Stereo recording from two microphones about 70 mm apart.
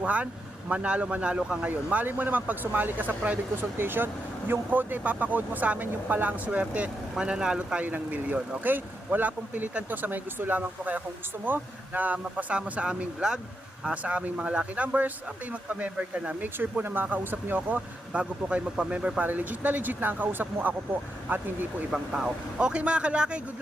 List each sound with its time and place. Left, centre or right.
0.0 s speech: centre
7.9 s speech: right
16.6 s speech: right
21.9 s speech: centre